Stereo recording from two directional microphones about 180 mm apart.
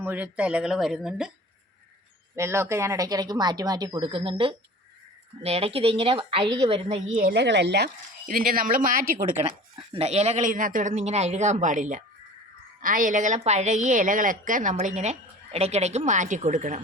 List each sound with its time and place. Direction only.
0.0 s speech: 10° right (ahead or behind)
2.3 s speech: 15° right (ahead or behind); by 7.0 s 35° right (ahead or behind)
7.3 s speech: 75° right (ahead or behind)
8.3 s a woman's voice: 50° right (ahead or behind)
9.4 s a woman's voice: 30° right (ahead or behind)